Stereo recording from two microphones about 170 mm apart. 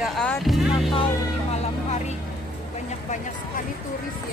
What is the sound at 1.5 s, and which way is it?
Vehicle, 40° left (ahead or behind).